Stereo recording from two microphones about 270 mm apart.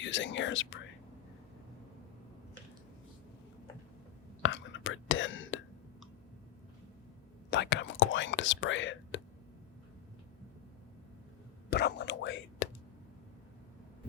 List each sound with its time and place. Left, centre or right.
0.0 s speech: left
4.4 s whispering: left
7.5 s whispering: left
11.7 s whispering: left